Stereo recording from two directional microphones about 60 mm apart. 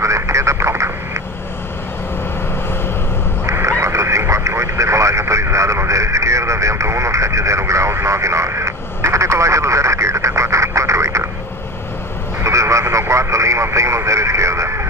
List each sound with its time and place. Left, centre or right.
0.0 s vehicle: right
3.4 s vehicle: right
12.4 s a sound: right